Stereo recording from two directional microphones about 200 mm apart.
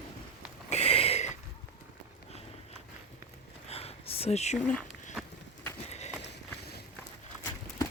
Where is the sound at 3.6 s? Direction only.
30° left (ahead or behind).